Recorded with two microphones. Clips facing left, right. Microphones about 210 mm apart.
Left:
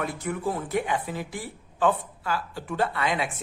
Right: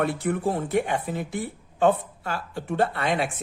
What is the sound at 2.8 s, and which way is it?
Speech, 55° right (ahead or behind).